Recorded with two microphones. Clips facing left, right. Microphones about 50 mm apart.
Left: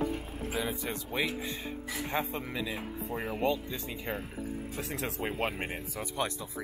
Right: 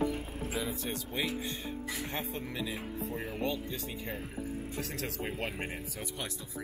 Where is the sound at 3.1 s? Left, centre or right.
Left.